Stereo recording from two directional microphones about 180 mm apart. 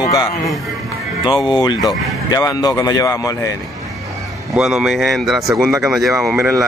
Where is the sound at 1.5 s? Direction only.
25° left (ahead or behind).